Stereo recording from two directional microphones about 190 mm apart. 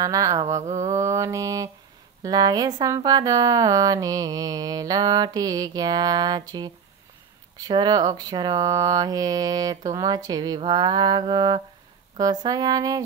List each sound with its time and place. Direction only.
0.0 s mantra: 15° right (ahead or behind)
0.6 s mantra: 35° right (ahead or behind)
0.8 s mantra: 15° right (ahead or behind)
2.2 s speech: 20° right (ahead or behind)